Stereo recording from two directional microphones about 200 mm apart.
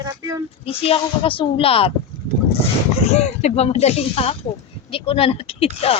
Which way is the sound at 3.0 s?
30° left (ahead or behind).